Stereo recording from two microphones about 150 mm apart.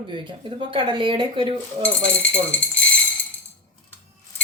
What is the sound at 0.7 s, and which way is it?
A woman's voice, 35° right (ahead or behind).